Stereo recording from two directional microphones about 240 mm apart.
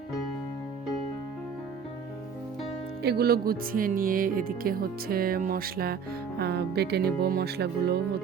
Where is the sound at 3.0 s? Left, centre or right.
Right.